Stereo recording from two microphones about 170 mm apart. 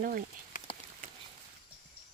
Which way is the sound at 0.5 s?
50° left (ahead or behind).